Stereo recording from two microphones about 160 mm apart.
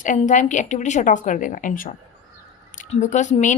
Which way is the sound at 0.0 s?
55° left (ahead or behind).